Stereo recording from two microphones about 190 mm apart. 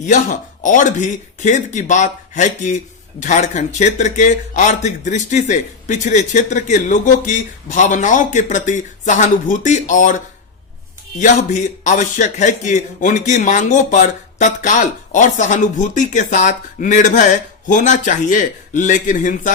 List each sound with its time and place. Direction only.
0.0 s speech: 40° left (ahead or behind)
11.2 s speech: 40° left (ahead or behind)